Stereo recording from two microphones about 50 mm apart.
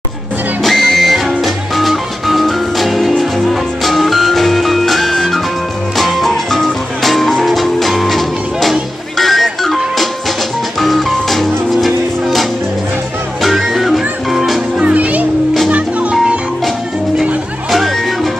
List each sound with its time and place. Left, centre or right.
0.7 s music: centre
10.8 s music: centre
14.8 s music: right
17.6 s music: centre